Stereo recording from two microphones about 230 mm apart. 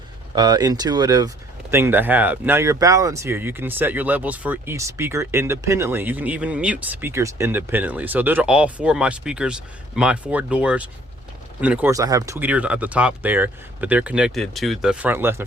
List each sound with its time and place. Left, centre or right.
0.3 s speech: centre